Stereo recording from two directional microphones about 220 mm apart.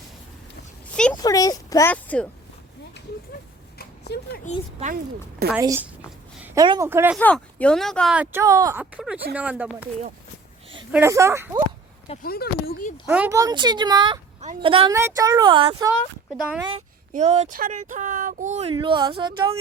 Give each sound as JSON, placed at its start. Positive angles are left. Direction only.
{"t": 1.1, "sound": "a sound", "side_deg": 15}
{"t": 4.1, "sound": "speech", "side_deg": 50}
{"t": 4.5, "sound": "speech", "side_deg": 30}
{"t": 5.5, "sound": "speech", "side_deg": -10}
{"t": 6.4, "sound": "a sound", "side_deg": -10}
{"t": 6.7, "sound": "speech", "side_deg": -15}
{"t": 7.2, "sound": "speech", "side_deg": 5}
{"t": 10.9, "sound": "speech", "side_deg": -10}
{"t": 12.2, "sound": "speech", "side_deg": 45}
{"t": 13.1, "sound": "speech", "side_deg": -10}
{"t": 14.9, "sound": "speech", "side_deg": -15}
{"t": 17.1, "sound": "speech", "side_deg": -30}